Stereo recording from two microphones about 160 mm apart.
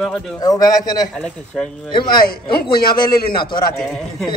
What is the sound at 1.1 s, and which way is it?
Speech, 5° left (ahead or behind).